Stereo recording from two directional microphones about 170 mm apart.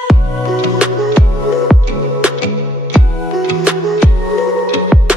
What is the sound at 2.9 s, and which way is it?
Music, 5° right (ahead or behind).